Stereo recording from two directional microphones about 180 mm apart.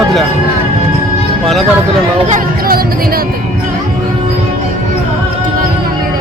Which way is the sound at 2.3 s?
55° right (ahead or behind).